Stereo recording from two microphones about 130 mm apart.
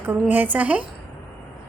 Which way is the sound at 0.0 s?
15° right (ahead or behind).